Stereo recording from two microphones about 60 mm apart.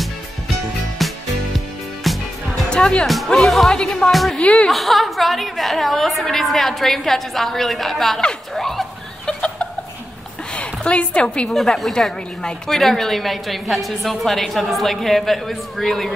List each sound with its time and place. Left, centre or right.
0.9 s music: centre
2.7 s music: centre
3.3 s a woman's voice: centre
4.4 s speech: centre
4.6 s a woman's voice: centre
9.2 s a sound: centre
10.5 s a woman's voice: centre
11.4 s a woman's voice: centre